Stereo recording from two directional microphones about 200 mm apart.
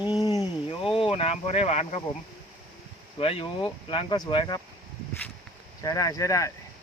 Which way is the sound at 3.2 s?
25° left (ahead or behind).